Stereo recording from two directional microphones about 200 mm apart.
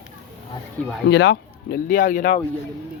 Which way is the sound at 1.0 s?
60° left (ahead or behind).